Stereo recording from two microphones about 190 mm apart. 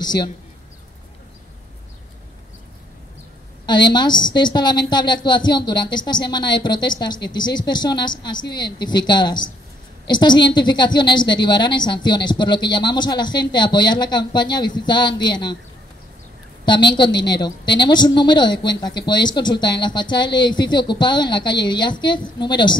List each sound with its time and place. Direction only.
0.0 s a woman's voice: 20° left (ahead or behind)
3.6 s a woman's voice: 25° left (ahead or behind)
16.6 s a woman's voice: 25° left (ahead or behind)